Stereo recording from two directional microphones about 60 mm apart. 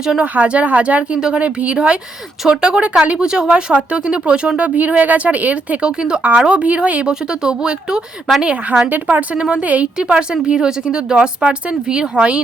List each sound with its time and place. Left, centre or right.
0.0 s speech: centre
8.9 s speech: right